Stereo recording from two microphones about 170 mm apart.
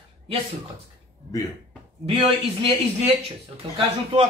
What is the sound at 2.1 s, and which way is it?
Speech, 30° right (ahead or behind).